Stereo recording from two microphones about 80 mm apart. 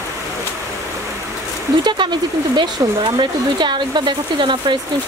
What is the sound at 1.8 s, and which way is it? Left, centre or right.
Speech, right.